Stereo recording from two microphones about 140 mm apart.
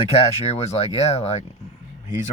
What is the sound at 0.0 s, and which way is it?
Speech, 45° left (ahead or behind).